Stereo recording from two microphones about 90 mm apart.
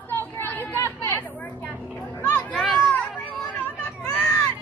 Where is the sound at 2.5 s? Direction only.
Centre (ahead or behind).